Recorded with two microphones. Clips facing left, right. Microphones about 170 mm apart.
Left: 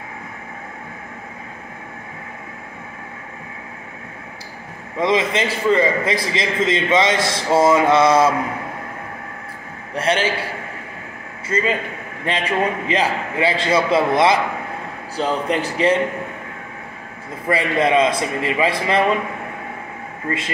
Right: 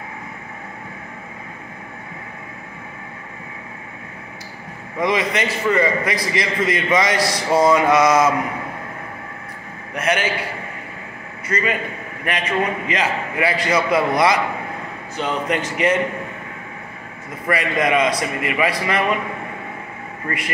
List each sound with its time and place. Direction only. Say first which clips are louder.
4.9 s a man's voice: left 2 dB; 25° left (ahead or behind)
9.9 s a man's voice: left 2 dB; 30° left (ahead or behind)
11.4 s a man's voice: left 1 dB; 30° left (ahead or behind)
17.5 s a man's voice: left 2 dB; 30° left (ahead or behind)
20.2 s a man's voice: left 2 dB; 25° left (ahead or behind)